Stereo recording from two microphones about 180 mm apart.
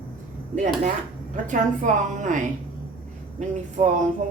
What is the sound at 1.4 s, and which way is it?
Speech, 45° right (ahead or behind).